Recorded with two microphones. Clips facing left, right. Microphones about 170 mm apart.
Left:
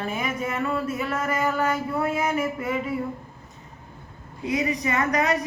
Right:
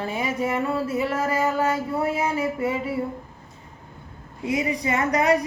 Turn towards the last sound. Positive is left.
turn(degrees=-30)  # may be behind; listen again after turning